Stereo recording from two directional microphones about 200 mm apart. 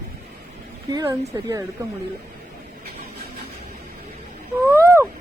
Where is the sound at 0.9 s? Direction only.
20° right (ahead or behind).